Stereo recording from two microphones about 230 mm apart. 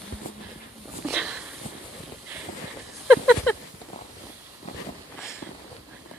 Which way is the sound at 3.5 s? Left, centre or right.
Centre.